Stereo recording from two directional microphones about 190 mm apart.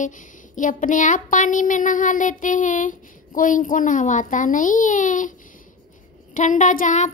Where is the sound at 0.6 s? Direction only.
45° left (ahead or behind).